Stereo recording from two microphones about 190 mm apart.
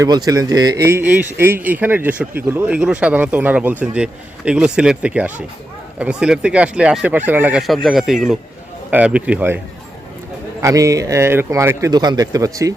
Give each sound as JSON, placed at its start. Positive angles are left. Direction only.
{"t": 0.3, "sound": "speech", "side_deg": -20}
{"t": 10.6, "sound": "speech", "side_deg": -15}